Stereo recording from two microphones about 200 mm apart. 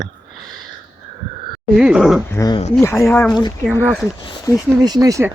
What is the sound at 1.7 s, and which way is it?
Speech, 5° right (ahead or behind).